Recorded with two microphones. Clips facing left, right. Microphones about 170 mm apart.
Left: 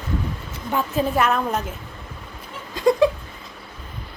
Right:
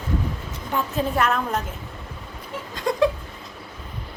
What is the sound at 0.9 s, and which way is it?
Speech, centre (ahead or behind).